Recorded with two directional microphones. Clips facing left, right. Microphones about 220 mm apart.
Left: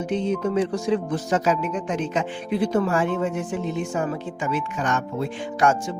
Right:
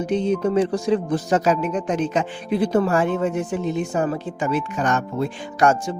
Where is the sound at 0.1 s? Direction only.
35° right (ahead or behind).